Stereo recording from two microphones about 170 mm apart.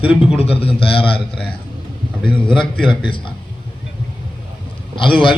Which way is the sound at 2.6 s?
30° left (ahead or behind).